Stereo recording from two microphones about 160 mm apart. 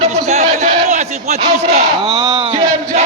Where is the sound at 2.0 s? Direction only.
25° right (ahead or behind).